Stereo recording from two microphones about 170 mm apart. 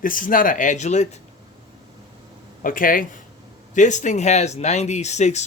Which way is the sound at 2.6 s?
55° left (ahead or behind).